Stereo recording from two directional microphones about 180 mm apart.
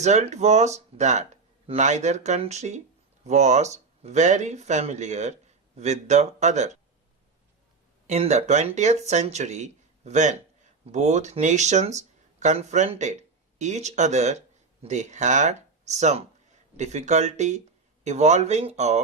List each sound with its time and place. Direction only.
0.0 s speech: 40° right (ahead or behind)
8.0 s speech: 40° right (ahead or behind)